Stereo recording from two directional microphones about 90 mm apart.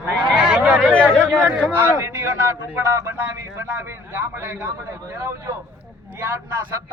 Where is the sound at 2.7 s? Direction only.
25° right (ahead or behind).